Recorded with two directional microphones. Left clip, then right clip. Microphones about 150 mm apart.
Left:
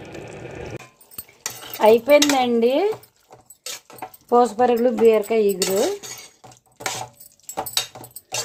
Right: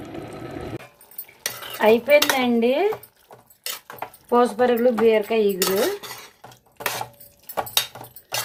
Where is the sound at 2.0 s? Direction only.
25° left (ahead or behind).